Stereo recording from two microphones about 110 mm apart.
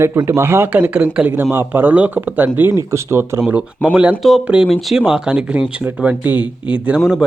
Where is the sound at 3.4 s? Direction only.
10° right (ahead or behind).